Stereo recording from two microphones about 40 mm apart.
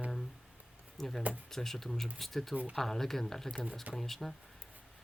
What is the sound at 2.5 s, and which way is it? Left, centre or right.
Speech, right.